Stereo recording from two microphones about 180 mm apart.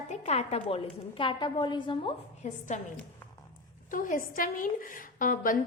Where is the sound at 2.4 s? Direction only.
40° left (ahead or behind).